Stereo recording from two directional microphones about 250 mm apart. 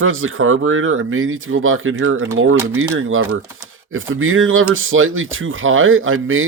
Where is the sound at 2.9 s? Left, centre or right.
Right.